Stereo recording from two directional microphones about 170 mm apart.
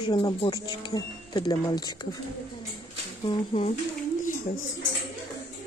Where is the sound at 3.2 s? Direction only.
35° left (ahead or behind).